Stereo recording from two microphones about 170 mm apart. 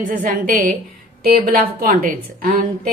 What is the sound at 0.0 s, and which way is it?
A woman's voice, 55° right (ahead or behind).